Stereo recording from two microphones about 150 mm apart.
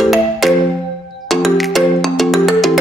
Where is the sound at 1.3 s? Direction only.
Centre (ahead or behind).